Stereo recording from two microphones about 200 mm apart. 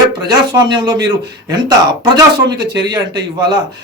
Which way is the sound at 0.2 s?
20° right (ahead or behind).